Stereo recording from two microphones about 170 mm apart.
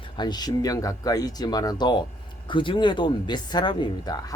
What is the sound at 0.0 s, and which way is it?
Speech, 25° left (ahead or behind).